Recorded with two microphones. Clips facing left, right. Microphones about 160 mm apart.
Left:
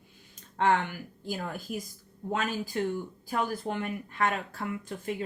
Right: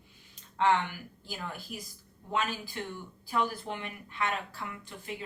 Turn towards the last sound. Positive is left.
turn(degrees=45)  # may be behind; listen again after turning